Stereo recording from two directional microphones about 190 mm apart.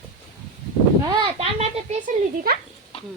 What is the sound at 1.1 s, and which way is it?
A child's voice, 25° right (ahead or behind).